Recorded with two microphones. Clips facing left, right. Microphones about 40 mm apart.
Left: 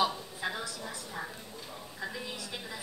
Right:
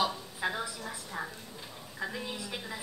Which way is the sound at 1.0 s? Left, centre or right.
Centre.